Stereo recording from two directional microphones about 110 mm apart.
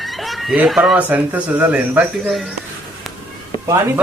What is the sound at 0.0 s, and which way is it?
Chicken, centre (ahead or behind).